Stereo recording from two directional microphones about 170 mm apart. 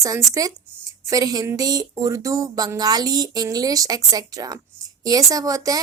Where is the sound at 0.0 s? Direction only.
20° right (ahead or behind).